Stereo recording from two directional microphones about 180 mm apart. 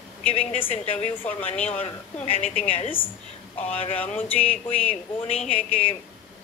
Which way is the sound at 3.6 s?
10° left (ahead or behind).